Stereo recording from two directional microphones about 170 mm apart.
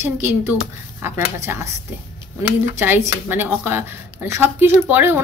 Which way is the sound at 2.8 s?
15° right (ahead or behind).